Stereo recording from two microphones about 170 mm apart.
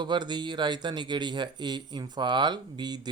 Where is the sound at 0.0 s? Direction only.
25° right (ahead or behind).